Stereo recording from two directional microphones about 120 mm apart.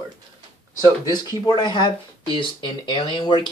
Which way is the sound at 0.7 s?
35° left (ahead or behind).